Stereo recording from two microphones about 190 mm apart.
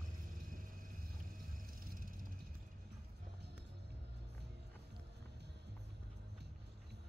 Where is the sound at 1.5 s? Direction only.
45° right (ahead or behind).